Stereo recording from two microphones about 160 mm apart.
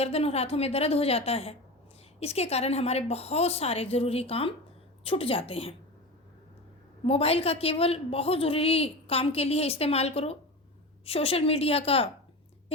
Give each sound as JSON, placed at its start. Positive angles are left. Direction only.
{"t": 0.0, "sound": "a woman's voice", "side_deg": 40}
{"t": 7.0, "sound": "a woman's voice", "side_deg": 40}